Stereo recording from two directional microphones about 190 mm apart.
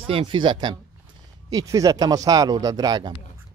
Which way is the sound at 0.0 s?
30° right (ahead or behind).